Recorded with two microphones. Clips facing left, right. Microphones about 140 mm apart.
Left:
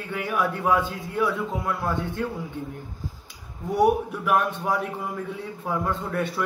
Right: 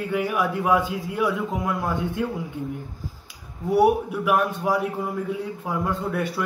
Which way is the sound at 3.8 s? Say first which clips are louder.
Right 2 dB; 10° right (ahead or behind).